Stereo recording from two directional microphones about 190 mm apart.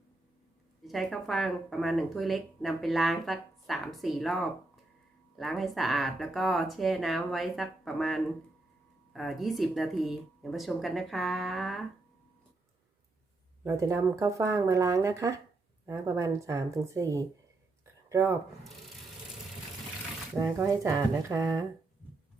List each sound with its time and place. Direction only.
0.9 s speech: centre (ahead or behind)
13.7 s speech: 15° right (ahead or behind)
20.4 s speech: 15° right (ahead or behind)